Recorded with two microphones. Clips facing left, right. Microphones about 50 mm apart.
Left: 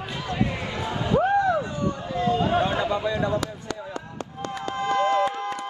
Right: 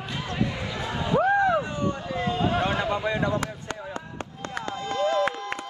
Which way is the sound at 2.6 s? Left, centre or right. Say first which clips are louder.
Left 1 dB; right.